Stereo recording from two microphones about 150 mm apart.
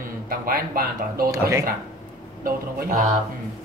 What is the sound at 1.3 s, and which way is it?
Speech, 20° right (ahead or behind).